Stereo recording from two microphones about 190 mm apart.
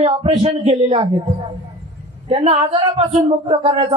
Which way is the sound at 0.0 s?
30° right (ahead or behind).